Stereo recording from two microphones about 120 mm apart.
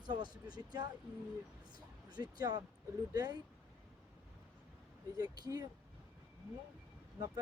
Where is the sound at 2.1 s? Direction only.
35° right (ahead or behind).